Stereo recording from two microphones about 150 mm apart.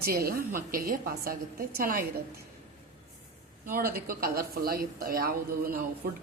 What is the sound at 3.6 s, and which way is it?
Speech, 80° right.